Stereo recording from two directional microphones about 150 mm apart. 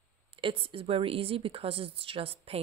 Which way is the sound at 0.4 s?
35° right (ahead or behind).